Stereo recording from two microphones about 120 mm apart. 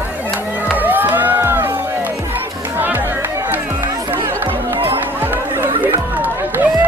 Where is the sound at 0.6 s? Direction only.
15° right (ahead or behind).